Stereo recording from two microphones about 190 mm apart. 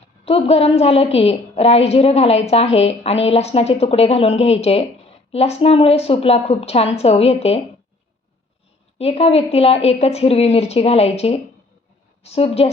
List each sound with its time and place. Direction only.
0.3 s a woman's voice: 30° left (ahead or behind)
9.0 s a woman's voice: 35° left (ahead or behind)